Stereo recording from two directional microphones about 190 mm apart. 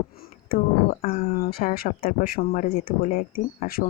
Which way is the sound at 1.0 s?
35° left (ahead or behind).